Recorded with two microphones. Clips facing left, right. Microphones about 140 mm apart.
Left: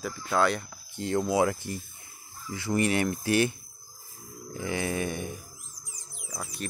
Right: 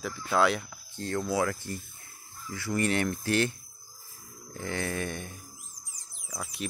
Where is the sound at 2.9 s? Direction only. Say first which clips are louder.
Left 2 dB; 10° left (ahead or behind).